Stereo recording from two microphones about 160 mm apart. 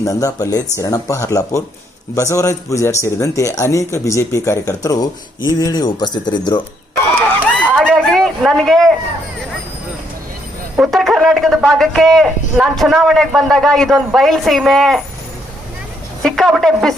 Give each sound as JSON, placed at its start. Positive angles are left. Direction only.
{"t": 0.0, "sound": "speech", "side_deg": 20}
{"t": 7.6, "sound": "a sound", "side_deg": -10}
{"t": 8.1, "sound": "a man's voice", "side_deg": 0}
{"t": 10.8, "sound": "a man's voice", "side_deg": 0}
{"t": 16.2, "sound": "a man's voice", "side_deg": 0}